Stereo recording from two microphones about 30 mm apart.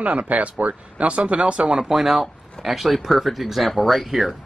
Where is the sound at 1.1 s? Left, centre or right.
Right.